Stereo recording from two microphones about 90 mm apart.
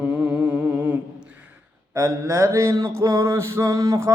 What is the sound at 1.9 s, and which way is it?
Mantra, 35° right (ahead or behind).